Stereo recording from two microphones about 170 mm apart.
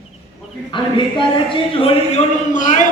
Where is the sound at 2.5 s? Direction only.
50° left (ahead or behind).